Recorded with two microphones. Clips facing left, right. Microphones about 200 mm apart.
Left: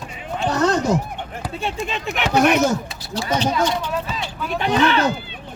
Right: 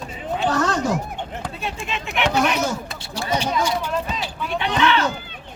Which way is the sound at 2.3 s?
50° left (ahead or behind).